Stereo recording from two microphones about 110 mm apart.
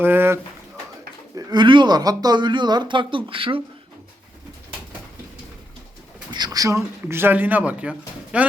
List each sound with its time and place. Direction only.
0.0 s pigeon: 20° right (ahead or behind)
1.4 s speech: 40° right (ahead or behind); by 3.6 s 55° right (ahead or behind)
6.3 s speech: 35° right (ahead or behind); by 8.4 s 10° right (ahead or behind)